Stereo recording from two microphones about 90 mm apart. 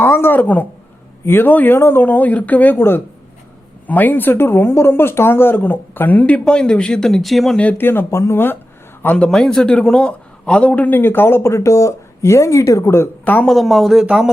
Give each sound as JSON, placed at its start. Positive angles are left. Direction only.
{"t": 0.0, "sound": "a man's voice", "side_deg": 25}
{"t": 7.6, "sound": "a man's voice", "side_deg": 20}
{"t": 9.1, "sound": "a man's voice", "side_deg": 5}
{"t": 13.5, "sound": "speech", "side_deg": 0}